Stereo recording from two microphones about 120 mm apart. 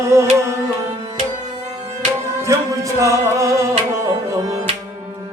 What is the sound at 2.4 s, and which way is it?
Music, 25° right (ahead or behind).